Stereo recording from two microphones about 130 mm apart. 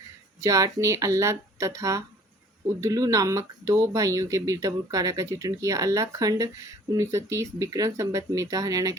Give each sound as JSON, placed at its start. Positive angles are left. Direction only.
{"t": 0.4, "sound": "speech", "side_deg": -25}